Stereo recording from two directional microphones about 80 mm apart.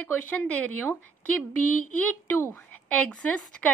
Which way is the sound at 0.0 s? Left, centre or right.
Centre.